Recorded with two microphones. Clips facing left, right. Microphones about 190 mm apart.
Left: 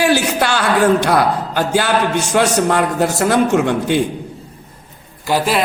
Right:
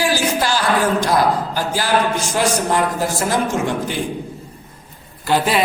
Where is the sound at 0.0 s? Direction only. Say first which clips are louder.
Left 3 dB; 65° left (ahead or behind).